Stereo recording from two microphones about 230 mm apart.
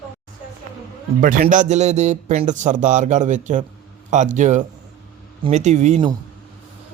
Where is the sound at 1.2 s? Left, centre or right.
Right.